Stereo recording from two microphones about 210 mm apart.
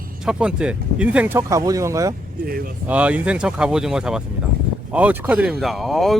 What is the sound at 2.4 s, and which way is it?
Speech, 45° right (ahead or behind).